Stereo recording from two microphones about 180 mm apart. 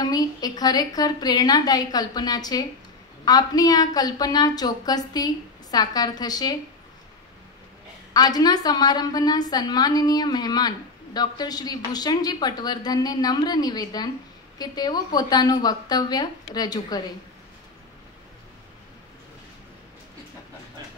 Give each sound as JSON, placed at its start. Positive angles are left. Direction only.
{"t": 0.0, "sound": "a woman's voice", "side_deg": 20}
{"t": 8.1, "sound": "a woman's voice", "side_deg": 20}